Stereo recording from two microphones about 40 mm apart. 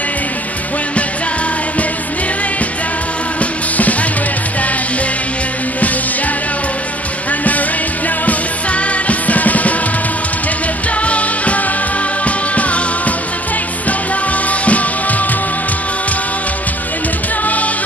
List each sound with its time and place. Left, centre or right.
3.3 s music: left
8.3 s music: left
11.0 s music: left